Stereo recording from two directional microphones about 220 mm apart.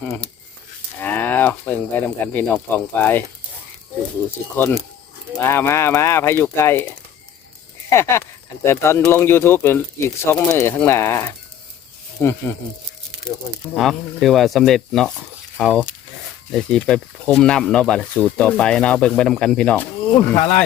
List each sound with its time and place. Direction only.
0.0 s speech: 5° left (ahead or behind)
4.5 s speech: 10° left (ahead or behind)
7.9 s speech: 10° left (ahead or behind)